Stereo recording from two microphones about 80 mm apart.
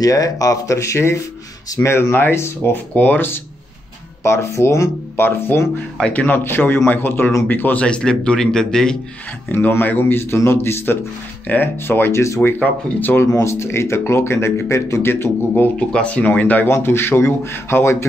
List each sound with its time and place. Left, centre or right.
0.0 s speech: left
4.2 s speech: left
5.9 s speech: centre
7.8 s speech: centre
9.5 s speech: left
15.9 s speech: centre
16.6 s speech: left